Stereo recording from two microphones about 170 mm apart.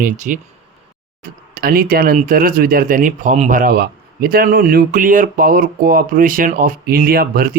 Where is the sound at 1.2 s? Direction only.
60° right (ahead or behind).